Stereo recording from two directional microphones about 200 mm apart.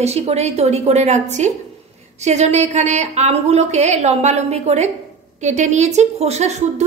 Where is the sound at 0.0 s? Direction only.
30° right (ahead or behind).